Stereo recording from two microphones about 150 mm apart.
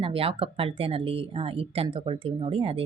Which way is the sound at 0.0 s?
40° right (ahead or behind).